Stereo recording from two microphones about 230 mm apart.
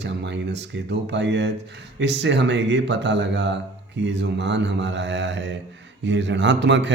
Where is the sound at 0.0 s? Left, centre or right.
Right.